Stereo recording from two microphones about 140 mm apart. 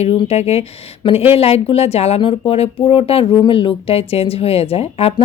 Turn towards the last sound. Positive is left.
turn(degrees=45)  # may be behind; listen again after turning